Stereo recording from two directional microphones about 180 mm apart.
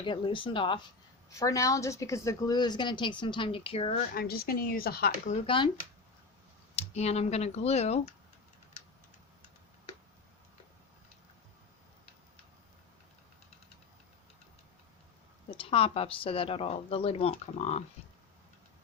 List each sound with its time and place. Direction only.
0.0 s a woman's voice: 30° left (ahead or behind)
1.3 s a woman's voice: 15° left (ahead or behind); by 4.0 s 35° left (ahead or behind)
4.1 s speech: 55° left (ahead or behind)
5.3 s a woman's voice: 30° left (ahead or behind)
6.7 s speech: 35° left (ahead or behind)
15.4 s speech: 30° left (ahead or behind)